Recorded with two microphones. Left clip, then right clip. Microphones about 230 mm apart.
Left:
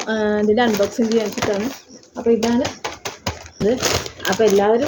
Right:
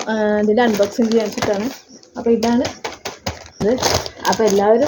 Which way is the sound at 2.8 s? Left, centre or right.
Centre.